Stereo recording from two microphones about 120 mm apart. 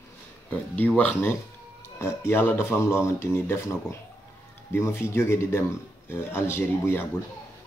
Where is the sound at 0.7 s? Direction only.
15° left (ahead or behind).